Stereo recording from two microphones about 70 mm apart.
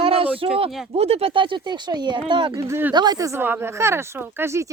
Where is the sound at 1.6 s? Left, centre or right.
Right.